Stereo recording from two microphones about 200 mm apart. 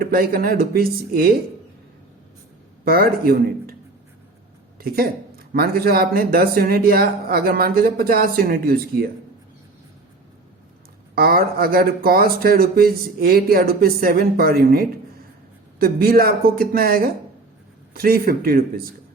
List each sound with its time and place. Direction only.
0.0 s speech: 50° right (ahead or behind)
2.8 s speech: 50° right (ahead or behind)
4.8 s speech: 50° right (ahead or behind)
11.1 s speech: 50° right (ahead or behind)